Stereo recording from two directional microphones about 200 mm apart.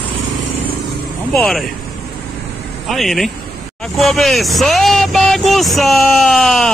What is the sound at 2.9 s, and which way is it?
Speech, centre (ahead or behind).